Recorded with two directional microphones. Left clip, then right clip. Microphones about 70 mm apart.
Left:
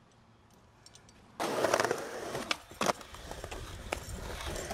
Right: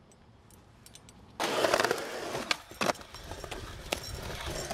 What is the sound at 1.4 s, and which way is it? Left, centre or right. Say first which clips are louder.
Skateboard: right 2 dB; centre.